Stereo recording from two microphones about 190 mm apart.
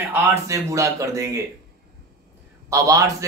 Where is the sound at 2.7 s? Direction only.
15° right (ahead or behind).